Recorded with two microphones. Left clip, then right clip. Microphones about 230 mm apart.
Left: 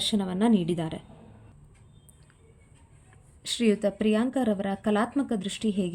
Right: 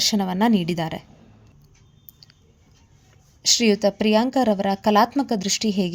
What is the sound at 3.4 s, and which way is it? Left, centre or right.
Speech, right.